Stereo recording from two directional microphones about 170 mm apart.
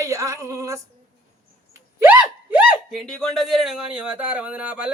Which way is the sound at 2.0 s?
10° right (ahead or behind).